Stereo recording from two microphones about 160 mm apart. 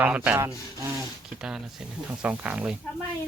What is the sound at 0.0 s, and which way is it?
Speech, 10° right (ahead or behind).